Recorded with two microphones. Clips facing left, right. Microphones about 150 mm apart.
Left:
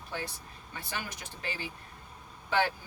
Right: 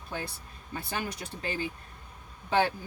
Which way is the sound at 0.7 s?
35° right (ahead or behind).